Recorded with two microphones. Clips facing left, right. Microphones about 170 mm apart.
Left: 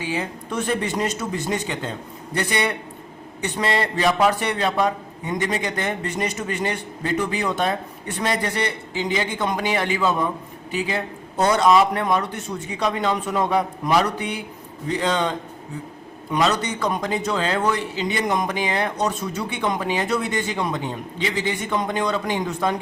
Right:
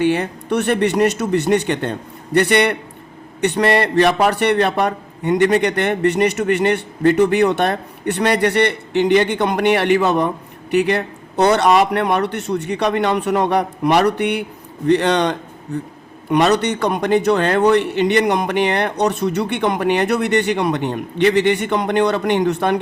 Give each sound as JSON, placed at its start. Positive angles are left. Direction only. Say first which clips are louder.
{"t": 0.0, "sound": "a man's voice", "louder": "right 9 dB", "side_deg": -65}